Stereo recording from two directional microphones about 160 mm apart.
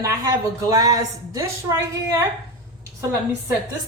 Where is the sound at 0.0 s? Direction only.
20° right (ahead or behind).